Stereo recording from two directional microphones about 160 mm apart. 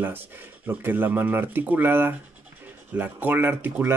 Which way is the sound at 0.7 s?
10° right (ahead or behind).